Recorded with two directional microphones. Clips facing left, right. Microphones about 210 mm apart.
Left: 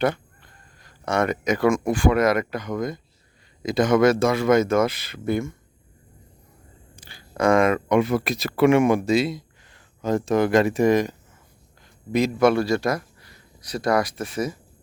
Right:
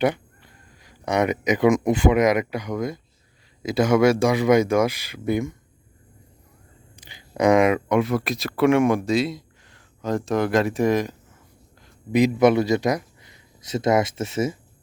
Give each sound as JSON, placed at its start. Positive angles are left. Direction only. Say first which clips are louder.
{"t": 0.0, "sound": "speech", "louder": "right 1 dB", "side_deg": -15}
{"t": 6.9, "sound": "a sound", "louder": "right 2 dB", "side_deg": -15}
{"t": 7.9, "sound": "speech", "louder": "left 1 dB", "side_deg": 0}
{"t": 12.1, "sound": "a man's voice", "louder": "right 2 dB", "side_deg": -15}